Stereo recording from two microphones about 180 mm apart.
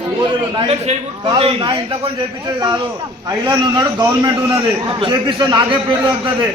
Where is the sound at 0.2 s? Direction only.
25° right (ahead or behind).